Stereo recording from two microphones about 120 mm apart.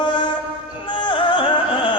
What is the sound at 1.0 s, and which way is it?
Music, 45° left (ahead or behind).